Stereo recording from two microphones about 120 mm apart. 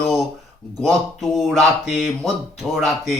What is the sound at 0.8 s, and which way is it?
Speech, centre (ahead or behind).